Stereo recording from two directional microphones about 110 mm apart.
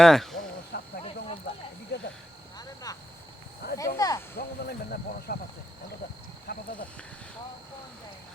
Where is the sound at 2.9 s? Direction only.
35° left (ahead or behind).